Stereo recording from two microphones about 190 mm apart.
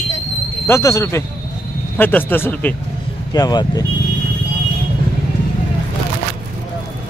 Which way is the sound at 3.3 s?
20° left (ahead or behind).